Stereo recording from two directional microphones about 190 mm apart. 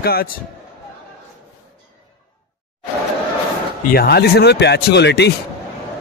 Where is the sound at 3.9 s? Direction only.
55° left (ahead or behind).